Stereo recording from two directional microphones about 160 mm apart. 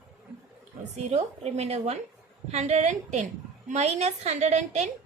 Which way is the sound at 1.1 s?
40° right (ahead or behind).